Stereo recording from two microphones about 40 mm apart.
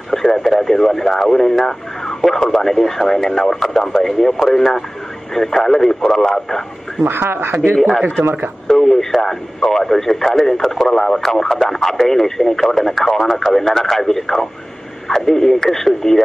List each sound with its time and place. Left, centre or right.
0.1 s speech: centre
7.0 s speech: right
8.6 s speech: centre